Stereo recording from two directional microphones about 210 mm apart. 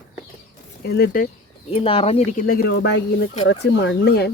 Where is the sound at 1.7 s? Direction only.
25° left (ahead or behind).